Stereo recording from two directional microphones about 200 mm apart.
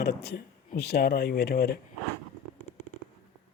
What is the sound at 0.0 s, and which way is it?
Speech, 55° left (ahead or behind).